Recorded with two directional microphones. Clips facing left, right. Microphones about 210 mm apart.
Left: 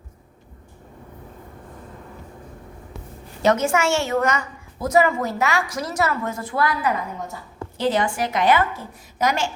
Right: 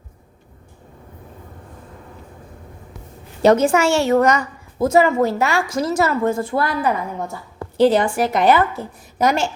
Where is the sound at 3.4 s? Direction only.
35° right (ahead or behind).